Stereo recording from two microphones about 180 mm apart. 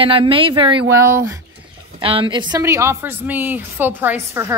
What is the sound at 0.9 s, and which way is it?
Speech, 15° right (ahead or behind).